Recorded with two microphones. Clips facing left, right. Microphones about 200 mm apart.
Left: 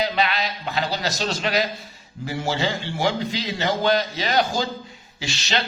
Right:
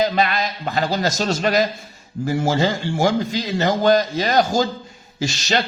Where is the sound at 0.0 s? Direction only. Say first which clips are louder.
Right 4 dB; 45° right (ahead or behind).